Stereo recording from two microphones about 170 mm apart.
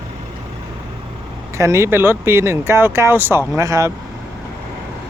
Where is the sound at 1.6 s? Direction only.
15° right (ahead or behind).